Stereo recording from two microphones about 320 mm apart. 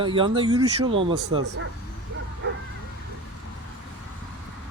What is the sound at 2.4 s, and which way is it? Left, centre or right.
Bow-wow, right.